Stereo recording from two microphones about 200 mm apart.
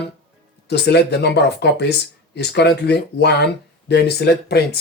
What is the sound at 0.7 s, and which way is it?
Speech, 55° left (ahead or behind).